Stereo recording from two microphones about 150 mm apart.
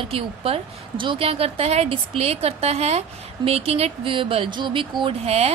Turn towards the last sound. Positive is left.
turn(degrees=-45)  # may be behind; listen again after turning